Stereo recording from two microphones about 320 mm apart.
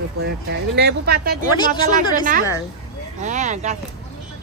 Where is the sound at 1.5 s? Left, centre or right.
Centre.